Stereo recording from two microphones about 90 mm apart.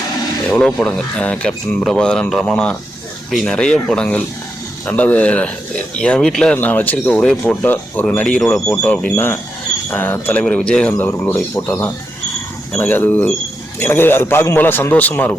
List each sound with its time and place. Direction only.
0.4 s speech: 15° left (ahead or behind)
6.6 s a man's voice: 20° left (ahead or behind)
10.4 s speech: 10° left (ahead or behind)
11.1 s a man's voice: 30° left (ahead or behind)